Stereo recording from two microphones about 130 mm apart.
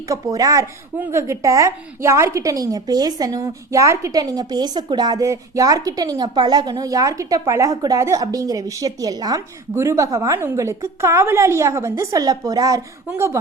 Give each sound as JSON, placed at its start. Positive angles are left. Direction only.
{"t": 0.1, "sound": "a woman's voice", "side_deg": -25}